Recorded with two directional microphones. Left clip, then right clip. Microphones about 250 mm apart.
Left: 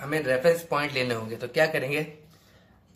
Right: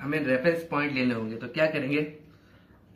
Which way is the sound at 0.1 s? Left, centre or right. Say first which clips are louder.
Left 3 dB; left.